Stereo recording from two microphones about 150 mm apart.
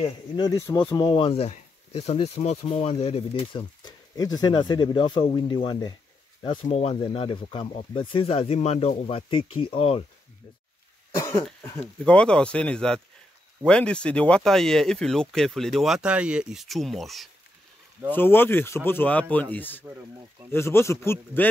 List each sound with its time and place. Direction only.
0.4 s speech: 20° left (ahead or behind)
6.7 s speech: 45° left (ahead or behind)
7.0 s speech: 35° left (ahead or behind)
11.1 s cough: 20° left (ahead or behind)
12.0 s speech: 5° left (ahead or behind)
18.1 s speech: 15° left (ahead or behind)